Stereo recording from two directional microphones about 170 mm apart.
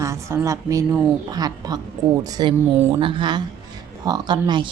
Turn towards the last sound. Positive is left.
turn(degrees=-25)  # may be behind; listen again after turning